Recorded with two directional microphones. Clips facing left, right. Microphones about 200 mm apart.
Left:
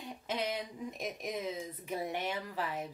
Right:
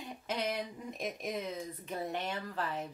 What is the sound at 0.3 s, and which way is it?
Speech, centre (ahead or behind).